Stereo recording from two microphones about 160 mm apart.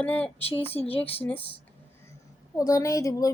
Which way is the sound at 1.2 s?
10° left (ahead or behind).